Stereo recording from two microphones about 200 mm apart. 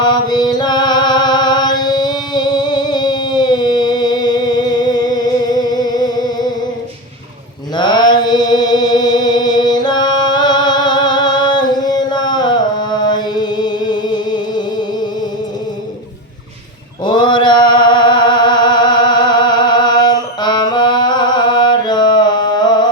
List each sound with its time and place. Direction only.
0.0 s mantra: 20° left (ahead or behind)
7.8 s music: 20° left (ahead or behind)
17.0 s music: 20° left (ahead or behind)